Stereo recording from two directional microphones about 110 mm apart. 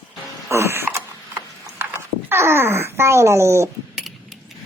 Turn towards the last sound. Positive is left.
turn(degrees=-25)  # may be behind; listen again after turning